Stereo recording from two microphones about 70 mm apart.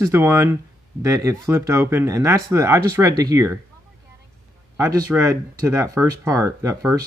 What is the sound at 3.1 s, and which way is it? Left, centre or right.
Speech, right.